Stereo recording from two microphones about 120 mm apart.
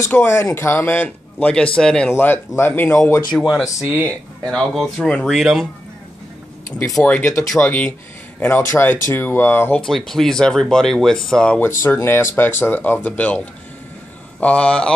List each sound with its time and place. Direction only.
0.1 s speech: 20° left (ahead or behind)
3.4 s speech: centre (ahead or behind)
3.8 s speech: 15° right (ahead or behind)
4.5 s speech: centre (ahead or behind)
6.8 s speech: 5° left (ahead or behind); by 9.8 s 20° left (ahead or behind)
9.8 s speech: 5° left (ahead or behind)
11.8 s speech: 20° left (ahead or behind)
14.4 s speech: 10° left (ahead or behind)